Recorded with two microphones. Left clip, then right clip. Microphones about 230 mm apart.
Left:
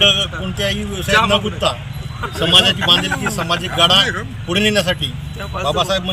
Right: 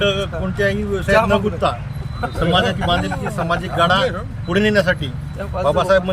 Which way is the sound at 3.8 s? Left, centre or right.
Centre.